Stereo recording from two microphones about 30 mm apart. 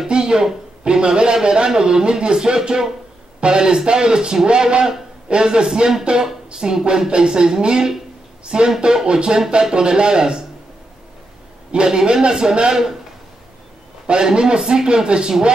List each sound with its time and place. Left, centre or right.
0.1 s a sound: right
0.8 s speech: right
11.7 s speech: right
14.2 s speech: right